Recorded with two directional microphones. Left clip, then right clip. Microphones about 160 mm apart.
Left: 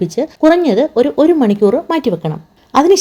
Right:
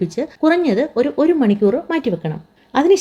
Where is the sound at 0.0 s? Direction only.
30° left (ahead or behind).